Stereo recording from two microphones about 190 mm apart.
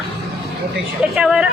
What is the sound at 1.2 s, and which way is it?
Speech, 5° right (ahead or behind).